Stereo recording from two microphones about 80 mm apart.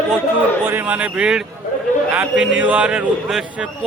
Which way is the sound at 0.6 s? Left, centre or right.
Right.